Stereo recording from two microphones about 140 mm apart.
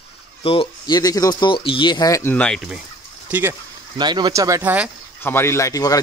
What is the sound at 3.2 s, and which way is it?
Speech, 10° right (ahead or behind).